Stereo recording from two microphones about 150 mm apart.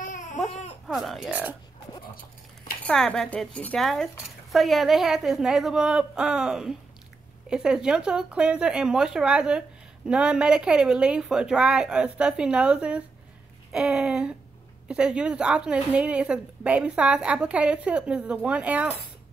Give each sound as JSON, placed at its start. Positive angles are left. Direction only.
{"t": 0.0, "sound": "baby cry", "side_deg": 60}
{"t": 0.8, "sound": "speech", "side_deg": 0}
{"t": 2.8, "sound": "a woman's voice", "side_deg": 5}